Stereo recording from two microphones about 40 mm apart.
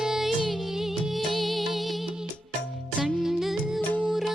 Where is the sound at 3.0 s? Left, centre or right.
Centre.